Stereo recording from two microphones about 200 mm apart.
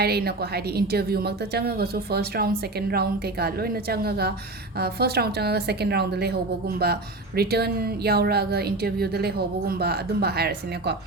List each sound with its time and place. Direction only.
0.0 s a woman's voice: 50° right (ahead or behind)